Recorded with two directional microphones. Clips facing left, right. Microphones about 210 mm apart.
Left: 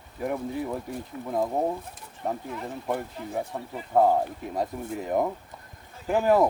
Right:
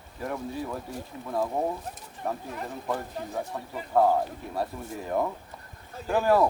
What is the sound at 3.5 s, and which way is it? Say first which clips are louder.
Speech: left 1 dB; 20° left (ahead or behind).